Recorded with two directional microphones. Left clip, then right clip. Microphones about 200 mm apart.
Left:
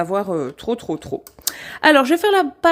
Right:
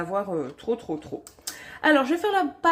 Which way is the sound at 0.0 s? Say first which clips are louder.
Left 7 dB; 50° left (ahead or behind).